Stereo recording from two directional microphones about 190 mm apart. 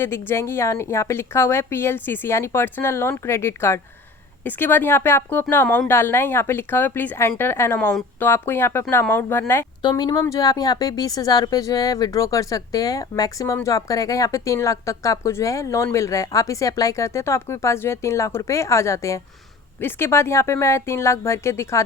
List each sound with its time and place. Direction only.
0.0 s speech: 10° left (ahead or behind)